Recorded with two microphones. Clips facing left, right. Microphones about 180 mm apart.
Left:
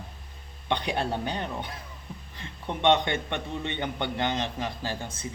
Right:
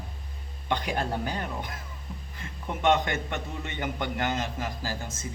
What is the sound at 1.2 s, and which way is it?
A man's voice, 25° left (ahead or behind).